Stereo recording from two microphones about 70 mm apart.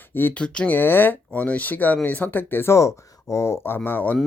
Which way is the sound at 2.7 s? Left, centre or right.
Left.